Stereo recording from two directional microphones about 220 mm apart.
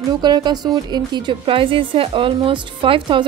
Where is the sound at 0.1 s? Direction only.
20° right (ahead or behind).